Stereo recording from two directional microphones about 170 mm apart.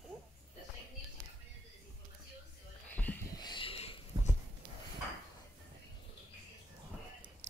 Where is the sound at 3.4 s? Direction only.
30° left (ahead or behind).